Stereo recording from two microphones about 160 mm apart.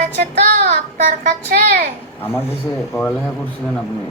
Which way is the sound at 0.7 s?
55° right (ahead or behind).